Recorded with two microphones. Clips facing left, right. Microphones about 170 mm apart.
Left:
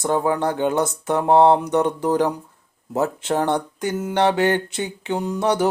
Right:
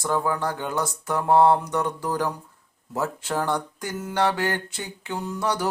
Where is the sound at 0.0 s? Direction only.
25° left (ahead or behind).